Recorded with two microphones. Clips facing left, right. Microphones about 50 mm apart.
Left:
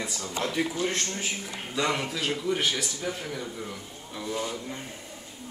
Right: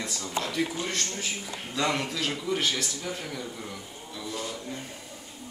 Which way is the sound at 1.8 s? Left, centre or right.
Centre.